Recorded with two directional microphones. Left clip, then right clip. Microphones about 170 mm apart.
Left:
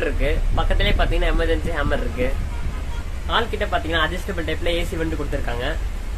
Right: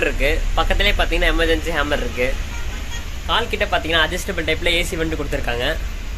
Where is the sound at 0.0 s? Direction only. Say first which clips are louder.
Right 4 dB; 15° right (ahead or behind).